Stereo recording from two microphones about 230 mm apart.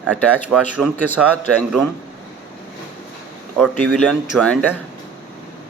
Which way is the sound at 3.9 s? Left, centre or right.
Centre.